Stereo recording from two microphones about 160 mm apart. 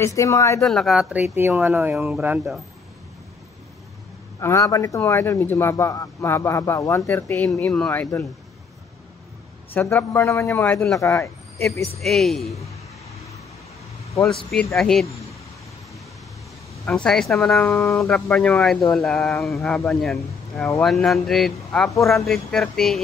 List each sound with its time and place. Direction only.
0.0 s speech: 20° left (ahead or behind)
0.6 s speech: centre (ahead or behind)
1.3 s speech: 15° right (ahead or behind)
4.4 s speech: 20° left (ahead or behind)
9.8 s speech: 15° left (ahead or behind)
11.0 s speech: 20° left (ahead or behind)
12.0 s speech: centre (ahead or behind)
14.5 s speech: 5° left (ahead or behind)
16.8 s speech: 5° left (ahead or behind)